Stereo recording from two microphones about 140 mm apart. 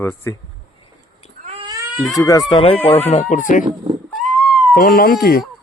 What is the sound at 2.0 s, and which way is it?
Speech, 25° left (ahead or behind).